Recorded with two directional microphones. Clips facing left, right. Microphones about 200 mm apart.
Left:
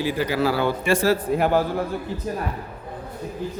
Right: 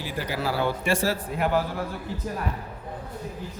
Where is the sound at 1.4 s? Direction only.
30° left (ahead or behind).